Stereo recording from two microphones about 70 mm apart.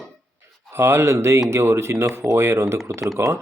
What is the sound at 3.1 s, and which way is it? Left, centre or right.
Speech, right.